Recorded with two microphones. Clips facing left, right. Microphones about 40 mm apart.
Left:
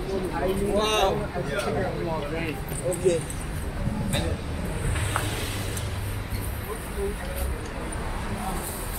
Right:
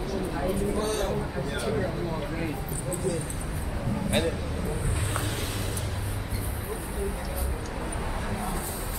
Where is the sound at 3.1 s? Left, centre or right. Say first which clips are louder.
Left 8 dB; left.